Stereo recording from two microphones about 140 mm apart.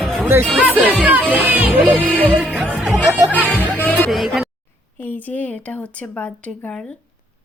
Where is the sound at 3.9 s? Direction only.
Centre (ahead or behind).